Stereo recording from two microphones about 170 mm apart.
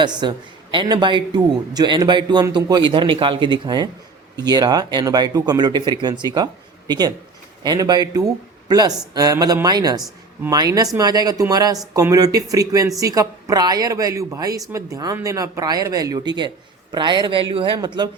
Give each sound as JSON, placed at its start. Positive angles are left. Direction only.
{"t": 0.0, "sound": "a man's voice", "side_deg": -25}